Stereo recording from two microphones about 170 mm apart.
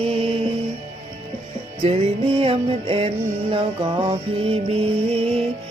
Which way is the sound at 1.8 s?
35° right (ahead or behind).